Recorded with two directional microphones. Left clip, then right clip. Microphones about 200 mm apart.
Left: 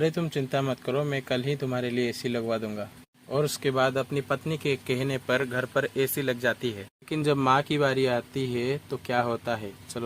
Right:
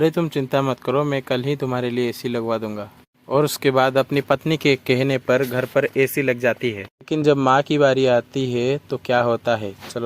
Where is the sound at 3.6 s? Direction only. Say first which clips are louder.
Right 8 dB; 40° right (ahead or behind).